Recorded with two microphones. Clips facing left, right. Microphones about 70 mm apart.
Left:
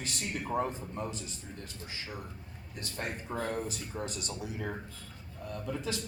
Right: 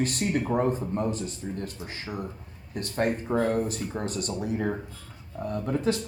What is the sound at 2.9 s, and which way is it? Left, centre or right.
Speech, right.